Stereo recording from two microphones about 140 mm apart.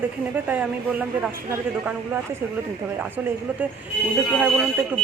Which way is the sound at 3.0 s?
10° right (ahead or behind).